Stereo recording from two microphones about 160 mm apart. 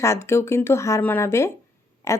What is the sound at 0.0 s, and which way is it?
A woman's voice, 15° left (ahead or behind).